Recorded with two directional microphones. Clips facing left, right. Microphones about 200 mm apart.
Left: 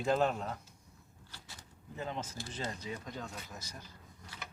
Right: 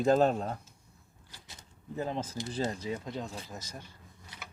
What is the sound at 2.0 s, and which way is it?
Speech, 35° right (ahead or behind).